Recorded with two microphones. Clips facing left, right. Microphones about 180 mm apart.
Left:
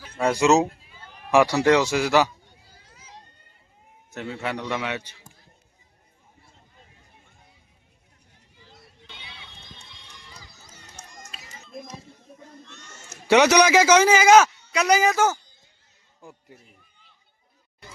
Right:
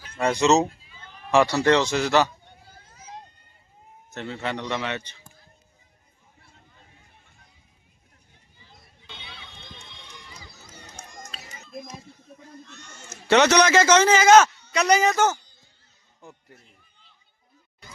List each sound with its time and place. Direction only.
0.2 s a man's voice: 5° left (ahead or behind)
0.7 s a sound: 55° left (ahead or behind)
1.3 s a man's voice: 15° left (ahead or behind)
2.9 s a sound: 45° right (ahead or behind)
4.1 s a man's voice: 5° left (ahead or behind)
13.2 s a man's voice: 10° left (ahead or behind)